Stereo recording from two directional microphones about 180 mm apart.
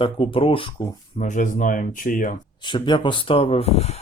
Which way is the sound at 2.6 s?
25° left (ahead or behind).